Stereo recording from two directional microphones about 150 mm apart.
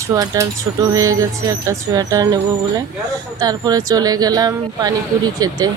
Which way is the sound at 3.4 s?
25° right (ahead or behind).